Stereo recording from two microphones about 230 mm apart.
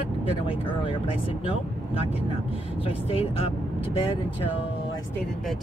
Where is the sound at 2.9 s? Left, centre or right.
Left.